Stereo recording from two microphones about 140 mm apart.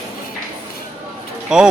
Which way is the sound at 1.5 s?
5° right (ahead or behind).